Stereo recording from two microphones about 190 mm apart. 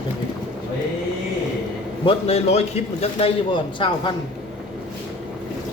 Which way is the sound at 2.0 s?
30° left (ahead or behind).